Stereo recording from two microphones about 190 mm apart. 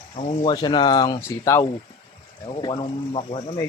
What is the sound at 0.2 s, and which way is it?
Speech, 35° left (ahead or behind).